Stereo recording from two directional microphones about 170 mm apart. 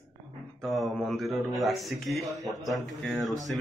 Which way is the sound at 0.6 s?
Centre (ahead or behind).